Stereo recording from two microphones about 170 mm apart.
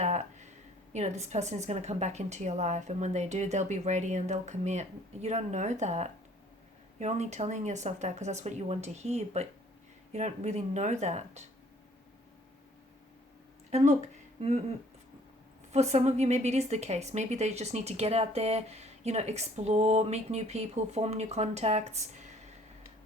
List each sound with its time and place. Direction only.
0.0 s a sound: 45° right (ahead or behind)
0.9 s a woman's voice: 40° right (ahead or behind)
13.7 s speech: 40° right (ahead or behind)
15.7 s a woman's voice: 40° right (ahead or behind)